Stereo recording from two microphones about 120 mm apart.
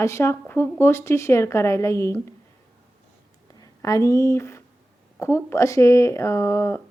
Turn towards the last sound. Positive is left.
turn(degrees=20)  # may be behind; listen again after turning